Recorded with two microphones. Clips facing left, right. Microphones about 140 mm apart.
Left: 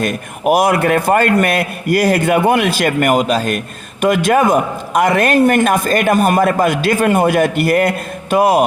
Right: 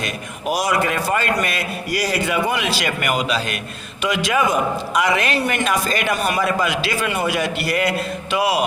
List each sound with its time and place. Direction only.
0.0 s a man's voice: 55° left (ahead or behind)